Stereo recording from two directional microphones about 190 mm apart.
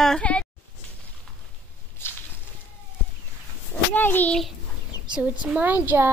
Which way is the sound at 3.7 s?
10° left (ahead or behind).